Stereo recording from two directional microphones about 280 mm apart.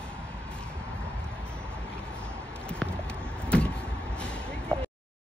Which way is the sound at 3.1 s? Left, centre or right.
Centre.